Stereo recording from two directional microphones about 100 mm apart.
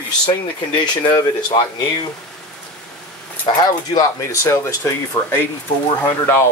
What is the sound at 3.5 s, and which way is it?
Speech, 35° left (ahead or behind).